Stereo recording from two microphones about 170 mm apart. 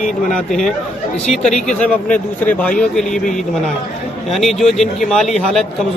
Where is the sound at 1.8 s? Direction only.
10° left (ahead or behind).